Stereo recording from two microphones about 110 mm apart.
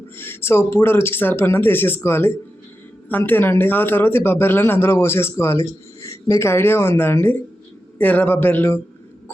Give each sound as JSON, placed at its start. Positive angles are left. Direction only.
{"t": 0.2, "sound": "a man's voice", "side_deg": 20}